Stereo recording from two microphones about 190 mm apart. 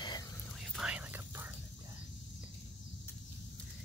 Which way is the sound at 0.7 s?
5° right (ahead or behind).